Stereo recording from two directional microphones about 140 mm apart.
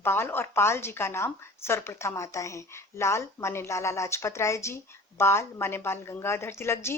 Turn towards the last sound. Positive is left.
turn(degrees=20)  # may be behind; listen again after turning